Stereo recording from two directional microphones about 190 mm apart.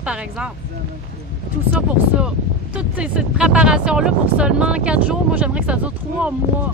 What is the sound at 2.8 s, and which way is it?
Speech, 5° right (ahead or behind).